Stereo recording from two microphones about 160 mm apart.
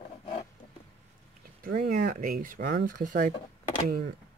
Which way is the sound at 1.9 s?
55° right (ahead or behind).